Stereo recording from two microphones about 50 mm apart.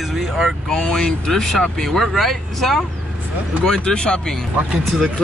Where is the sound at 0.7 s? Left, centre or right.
Centre.